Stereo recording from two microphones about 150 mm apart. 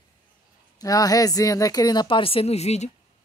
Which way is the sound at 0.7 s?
25° left (ahead or behind).